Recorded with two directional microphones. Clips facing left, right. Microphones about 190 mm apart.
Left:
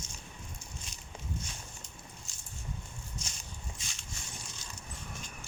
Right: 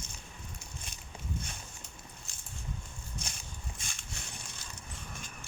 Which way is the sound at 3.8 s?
55° right (ahead or behind).